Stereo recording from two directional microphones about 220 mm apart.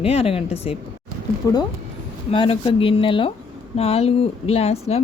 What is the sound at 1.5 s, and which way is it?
Speech, 15° left (ahead or behind).